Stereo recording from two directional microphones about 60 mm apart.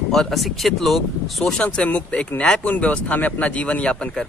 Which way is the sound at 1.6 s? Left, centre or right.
Left.